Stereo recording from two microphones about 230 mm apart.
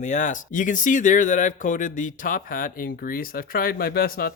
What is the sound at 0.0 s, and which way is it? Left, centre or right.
Speech, left.